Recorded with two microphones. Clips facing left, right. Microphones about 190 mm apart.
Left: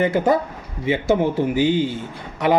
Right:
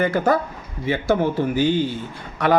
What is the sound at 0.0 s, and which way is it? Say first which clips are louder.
A man's voice: left 1 dB; 20° left (ahead or behind).